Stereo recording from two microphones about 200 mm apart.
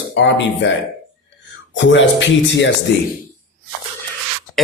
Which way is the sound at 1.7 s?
65° left (ahead or behind).